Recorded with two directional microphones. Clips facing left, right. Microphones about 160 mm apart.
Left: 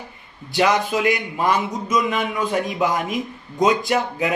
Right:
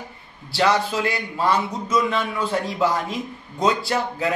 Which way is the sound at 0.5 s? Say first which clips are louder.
Left 1 dB; 15° left (ahead or behind).